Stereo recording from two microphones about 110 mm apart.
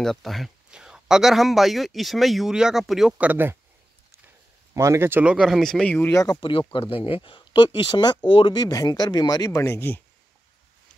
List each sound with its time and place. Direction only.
0.0 s speech: centre (ahead or behind); by 3.5 s 15° right (ahead or behind)
4.7 s speech: 25° right (ahead or behind)
5.2 s speech: 5° right (ahead or behind)
5.9 s speech: 20° left (ahead or behind)
6.7 s speech: 55° left (ahead or behind); by 10.0 s 20° left (ahead or behind)